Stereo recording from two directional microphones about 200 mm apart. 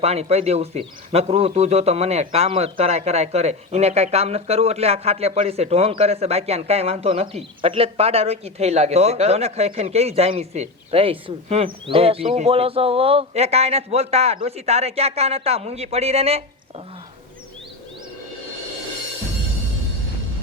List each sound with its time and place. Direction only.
0.0 s a man's voice: 30° right (ahead or behind)